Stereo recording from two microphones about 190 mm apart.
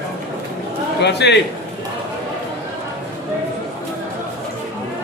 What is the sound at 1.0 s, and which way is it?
Speech, 65° left (ahead or behind).